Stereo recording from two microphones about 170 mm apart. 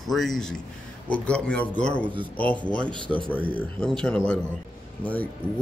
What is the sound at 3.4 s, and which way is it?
Speech, 10° left (ahead or behind).